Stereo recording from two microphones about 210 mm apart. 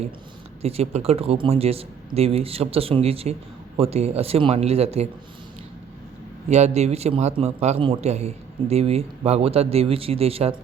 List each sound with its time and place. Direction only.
0.6 s a man's voice: 30° right (ahead or behind)
6.5 s a man's voice: 30° right (ahead or behind)